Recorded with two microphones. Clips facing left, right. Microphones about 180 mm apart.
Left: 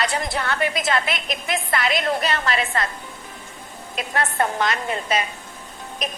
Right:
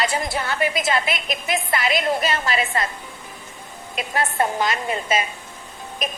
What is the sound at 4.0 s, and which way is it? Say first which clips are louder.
A woman's voice: right 1 dB; centre (ahead or behind).